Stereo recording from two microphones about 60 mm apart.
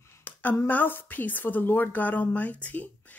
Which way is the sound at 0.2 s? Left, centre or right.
Left.